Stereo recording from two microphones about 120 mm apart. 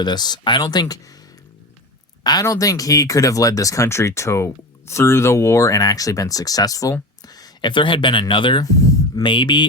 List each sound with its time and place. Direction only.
0.0 s speech: 35° left (ahead or behind)
2.2 s speech: 30° left (ahead or behind)
8.6 s a sound: 30° left (ahead or behind)
9.2 s speech: 40° left (ahead or behind)